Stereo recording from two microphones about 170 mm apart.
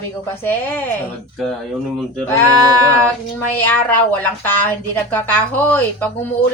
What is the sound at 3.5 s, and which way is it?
Speech, 10° left (ahead or behind).